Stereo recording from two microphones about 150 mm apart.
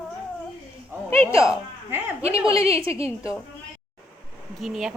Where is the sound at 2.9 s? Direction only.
20° left (ahead or behind).